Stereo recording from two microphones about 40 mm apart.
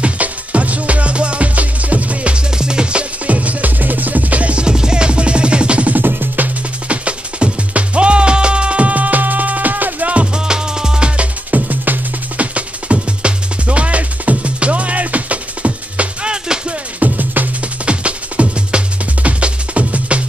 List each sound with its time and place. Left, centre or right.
0.0 s music: right
2.3 s music: right
4.6 s music: right
5.9 s music: right
6.9 s music: right
10.3 s music: centre
11.1 s music: right
12.5 s music: right
17.0 s music: right
17.8 s music: right